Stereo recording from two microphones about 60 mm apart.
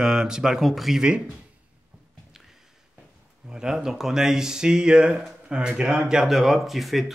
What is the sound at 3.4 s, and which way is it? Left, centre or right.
Speech, centre.